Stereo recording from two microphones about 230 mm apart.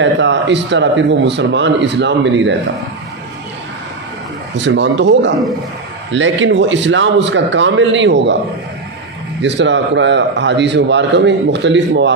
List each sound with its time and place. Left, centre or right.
0.0 s a man's voice: right
4.5 s a man's voice: right
9.4 s a man's voice: right